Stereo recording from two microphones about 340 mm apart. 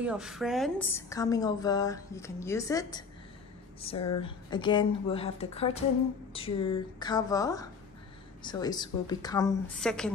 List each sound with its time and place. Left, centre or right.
0.0 s a woman's voice: centre